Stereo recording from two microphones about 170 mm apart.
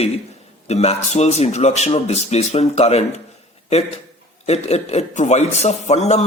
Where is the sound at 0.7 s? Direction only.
40° left (ahead or behind).